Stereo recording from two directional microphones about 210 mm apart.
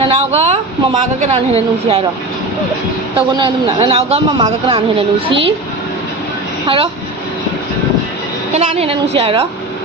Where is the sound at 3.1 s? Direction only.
25° right (ahead or behind).